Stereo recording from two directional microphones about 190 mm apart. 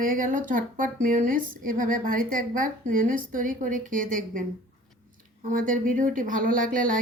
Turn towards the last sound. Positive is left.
turn(degrees=-45)  # may be behind; listen again after turning